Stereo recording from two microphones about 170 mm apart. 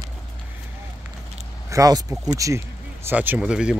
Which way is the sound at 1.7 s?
20° right (ahead or behind).